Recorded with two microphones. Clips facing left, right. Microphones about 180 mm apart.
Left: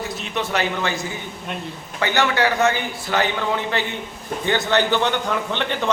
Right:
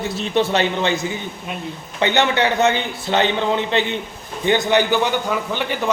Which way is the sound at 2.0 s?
20° right (ahead or behind).